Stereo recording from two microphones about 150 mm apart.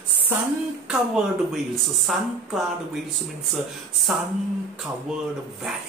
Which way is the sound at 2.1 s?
Centre (ahead or behind).